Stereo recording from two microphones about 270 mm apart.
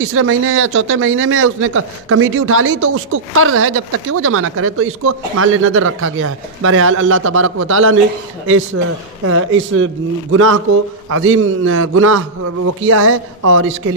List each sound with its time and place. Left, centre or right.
0.0 s speech: right
11.1 s speech: right